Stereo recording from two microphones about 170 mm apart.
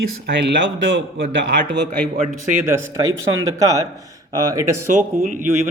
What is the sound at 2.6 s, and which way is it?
Speech, 15° right (ahead or behind).